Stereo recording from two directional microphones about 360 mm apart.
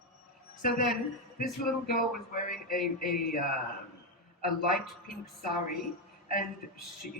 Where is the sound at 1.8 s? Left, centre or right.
Left.